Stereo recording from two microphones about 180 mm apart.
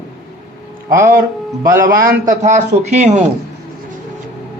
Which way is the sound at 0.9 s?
15° right (ahead or behind).